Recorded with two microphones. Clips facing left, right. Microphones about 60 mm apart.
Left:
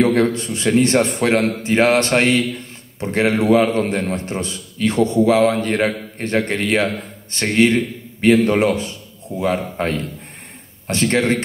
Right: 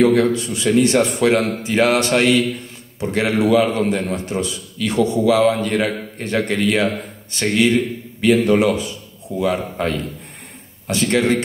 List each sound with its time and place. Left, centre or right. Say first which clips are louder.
0.1 s a man's voice: right 1 dB; left